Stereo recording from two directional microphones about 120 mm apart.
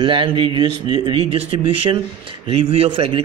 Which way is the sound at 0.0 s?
45° right (ahead or behind).